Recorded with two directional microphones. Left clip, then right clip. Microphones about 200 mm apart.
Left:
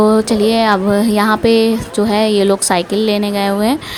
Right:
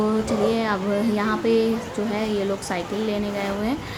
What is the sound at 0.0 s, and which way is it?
Speech, 40° left (ahead or behind).